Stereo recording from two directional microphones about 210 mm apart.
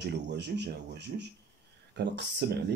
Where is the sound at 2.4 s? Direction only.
50° right (ahead or behind).